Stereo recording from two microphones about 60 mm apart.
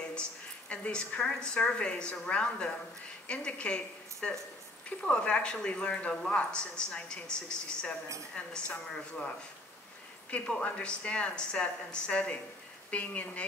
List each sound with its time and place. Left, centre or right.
0.0 s a woman's voice: centre
10.6 s speech: centre